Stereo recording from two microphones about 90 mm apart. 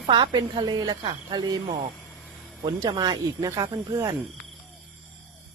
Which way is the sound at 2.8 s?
45° right (ahead or behind).